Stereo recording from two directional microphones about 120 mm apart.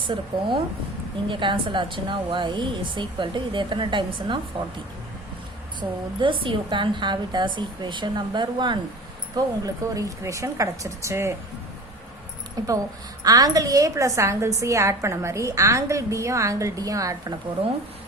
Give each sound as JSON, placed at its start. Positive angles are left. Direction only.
{"t": 0.0, "sound": "speech", "side_deg": -45}
{"t": 6.1, "sound": "a woman's voice", "side_deg": -45}
{"t": 12.6, "sound": "a woman's voice", "side_deg": -30}